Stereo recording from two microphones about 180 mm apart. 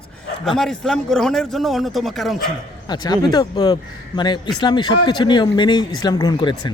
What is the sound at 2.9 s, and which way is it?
Speech, 20° left (ahead or behind).